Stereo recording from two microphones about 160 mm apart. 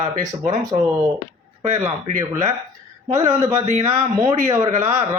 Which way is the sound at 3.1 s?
20° right (ahead or behind).